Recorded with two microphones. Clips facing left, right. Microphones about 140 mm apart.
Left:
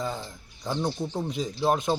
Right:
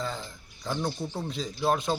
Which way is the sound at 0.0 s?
15° left (ahead or behind).